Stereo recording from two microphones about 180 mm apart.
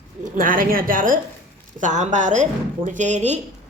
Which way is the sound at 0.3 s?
50° right (ahead or behind).